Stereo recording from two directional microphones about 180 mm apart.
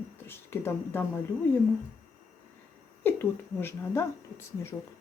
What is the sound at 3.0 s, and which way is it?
Speech, 10° left (ahead or behind).